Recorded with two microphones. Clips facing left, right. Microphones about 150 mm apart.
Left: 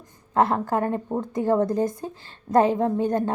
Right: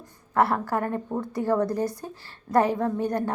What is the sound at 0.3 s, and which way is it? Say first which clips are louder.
A woman's voice: left 2 dB; 20° left (ahead or behind).